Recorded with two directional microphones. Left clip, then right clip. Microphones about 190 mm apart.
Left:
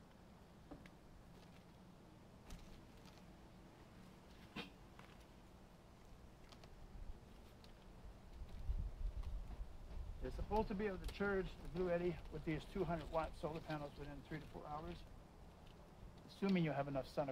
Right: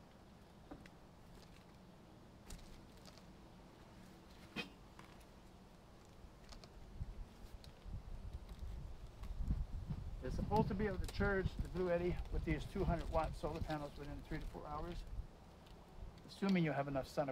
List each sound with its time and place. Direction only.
10.2 s speech: 5° right (ahead or behind)
16.3 s speech: 15° right (ahead or behind)